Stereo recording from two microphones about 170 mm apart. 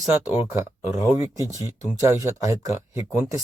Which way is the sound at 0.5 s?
15° right (ahead or behind).